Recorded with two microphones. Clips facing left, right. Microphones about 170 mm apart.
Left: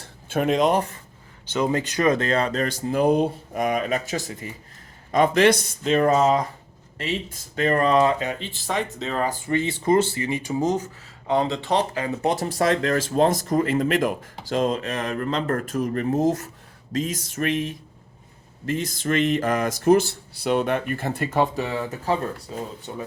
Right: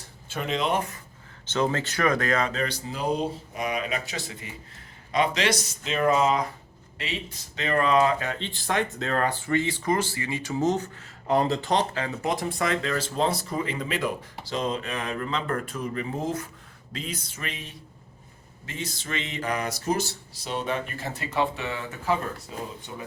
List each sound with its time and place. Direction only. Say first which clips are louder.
0.3 s speech: left 7 dB; 50° left (ahead or behind)
1.5 s speech: left 3 dB; 10° left (ahead or behind); by 8.1 s 35° left (ahead or behind)
8.2 s speech: left 3 dB; 10° left (ahead or behind)
9.5 s speech: left 7 dB; 20° left (ahead or behind)
11.3 s speech: left 1 dB; centre (ahead or behind)
12.5 s speech: left 6 dB; 40° left (ahead or behind)
21.5 s speech: left 6 dB; 40° left (ahead or behind)